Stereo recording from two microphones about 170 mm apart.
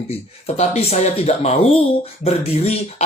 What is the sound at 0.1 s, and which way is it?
Speech, 40° left (ahead or behind).